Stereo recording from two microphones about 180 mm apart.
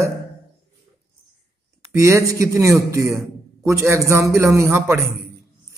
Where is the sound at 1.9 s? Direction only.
15° right (ahead or behind).